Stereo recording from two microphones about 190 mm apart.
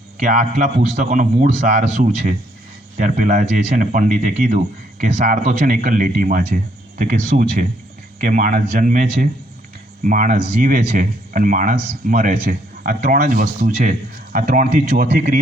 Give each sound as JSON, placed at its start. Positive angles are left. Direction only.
{"t": 0.2, "sound": "speech", "side_deg": -40}
{"t": 3.0, "sound": "speech", "side_deg": -40}